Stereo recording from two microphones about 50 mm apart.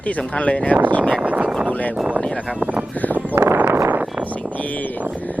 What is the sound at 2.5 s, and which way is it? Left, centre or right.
Speech, right.